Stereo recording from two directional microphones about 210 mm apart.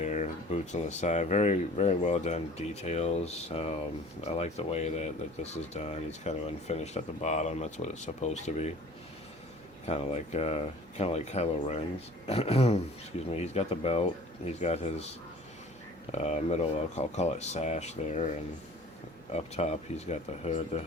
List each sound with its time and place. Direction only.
0.0 s speech: 35° left (ahead or behind)
9.8 s speech: 30° left (ahead or behind)
16.1 s speech: 30° left (ahead or behind)